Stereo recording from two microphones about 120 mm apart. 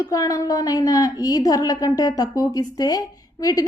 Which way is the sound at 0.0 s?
30° left (ahead or behind).